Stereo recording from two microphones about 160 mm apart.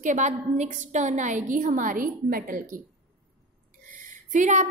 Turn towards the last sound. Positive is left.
turn(degrees=-50)  # may be behind; listen again after turning